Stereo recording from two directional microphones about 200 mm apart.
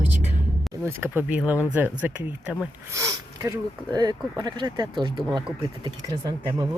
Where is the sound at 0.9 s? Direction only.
10° right (ahead or behind).